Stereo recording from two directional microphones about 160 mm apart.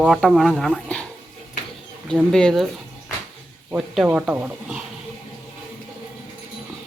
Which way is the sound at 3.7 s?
5° right (ahead or behind).